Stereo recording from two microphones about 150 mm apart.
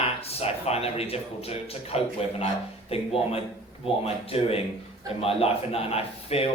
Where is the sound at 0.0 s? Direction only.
40° left (ahead or behind).